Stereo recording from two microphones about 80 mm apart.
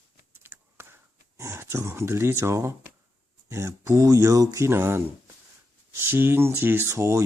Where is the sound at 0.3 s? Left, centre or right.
Right.